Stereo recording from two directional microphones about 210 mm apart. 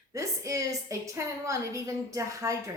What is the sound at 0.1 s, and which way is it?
A woman's voice, 15° right (ahead or behind).